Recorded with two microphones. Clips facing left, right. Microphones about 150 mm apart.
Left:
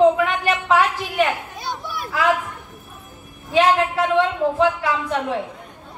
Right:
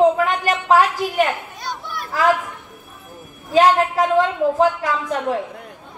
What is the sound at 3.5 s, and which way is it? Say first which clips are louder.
Speech: right 2 dB; 40° right (ahead or behind).